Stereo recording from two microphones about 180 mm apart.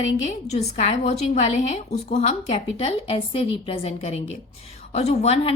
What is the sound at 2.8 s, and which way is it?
A woman's voice, 30° left (ahead or behind).